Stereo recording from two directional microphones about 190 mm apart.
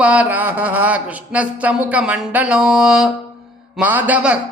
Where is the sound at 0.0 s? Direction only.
10° right (ahead or behind).